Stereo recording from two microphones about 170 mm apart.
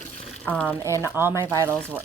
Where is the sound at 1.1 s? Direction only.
15° right (ahead or behind).